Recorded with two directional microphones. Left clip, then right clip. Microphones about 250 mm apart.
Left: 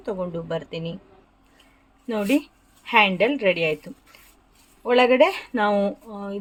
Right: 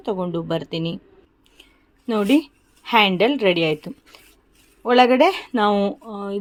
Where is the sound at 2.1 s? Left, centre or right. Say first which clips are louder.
Right 4 dB; right.